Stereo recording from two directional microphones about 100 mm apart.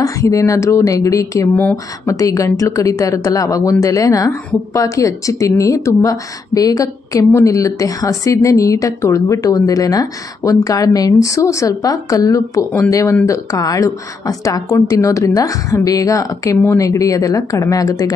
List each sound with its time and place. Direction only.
0.0 s speech: 35° left (ahead or behind)
1.5 s speech: 15° left (ahead or behind)
2.0 s speech: 35° left (ahead or behind)